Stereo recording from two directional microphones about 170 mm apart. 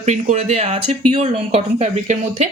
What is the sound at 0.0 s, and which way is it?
A woman's voice, 45° right (ahead or behind).